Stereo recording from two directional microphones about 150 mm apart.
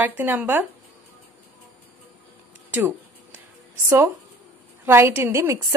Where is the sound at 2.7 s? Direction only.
10° right (ahead or behind).